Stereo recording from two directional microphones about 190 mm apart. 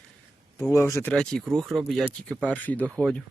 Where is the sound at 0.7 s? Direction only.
15° left (ahead or behind).